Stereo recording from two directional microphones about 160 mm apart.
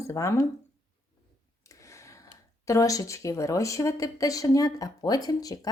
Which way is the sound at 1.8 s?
20° left (ahead or behind).